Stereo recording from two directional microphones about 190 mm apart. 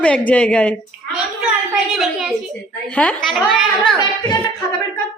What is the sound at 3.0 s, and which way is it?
Speech, 5° left (ahead or behind).